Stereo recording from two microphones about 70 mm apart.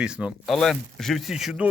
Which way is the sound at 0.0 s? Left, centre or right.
Centre.